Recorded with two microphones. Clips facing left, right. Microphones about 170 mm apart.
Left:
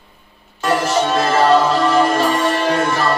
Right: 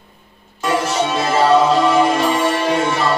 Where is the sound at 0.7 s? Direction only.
Centre (ahead or behind).